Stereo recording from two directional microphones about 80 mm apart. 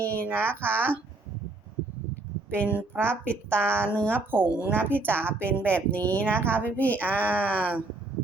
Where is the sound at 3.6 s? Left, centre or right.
Right.